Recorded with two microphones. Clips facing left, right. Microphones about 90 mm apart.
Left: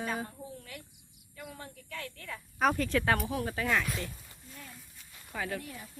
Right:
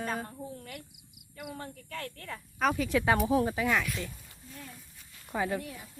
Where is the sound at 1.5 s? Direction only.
40° right (ahead or behind).